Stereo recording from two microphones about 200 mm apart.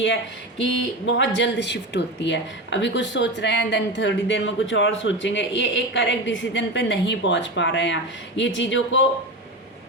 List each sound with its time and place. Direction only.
1.0 s a woman's voice: 65° left (ahead or behind)